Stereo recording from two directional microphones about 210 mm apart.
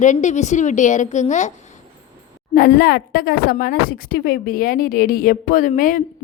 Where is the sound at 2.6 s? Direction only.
45° left (ahead or behind).